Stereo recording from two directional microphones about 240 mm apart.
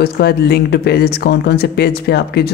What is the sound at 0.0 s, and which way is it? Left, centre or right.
Speech, left.